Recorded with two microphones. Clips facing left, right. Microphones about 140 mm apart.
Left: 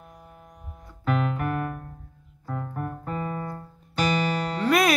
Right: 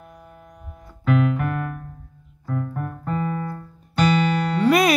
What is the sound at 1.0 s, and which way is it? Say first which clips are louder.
Keyboard: right 5 dB; 45° left (ahead or behind).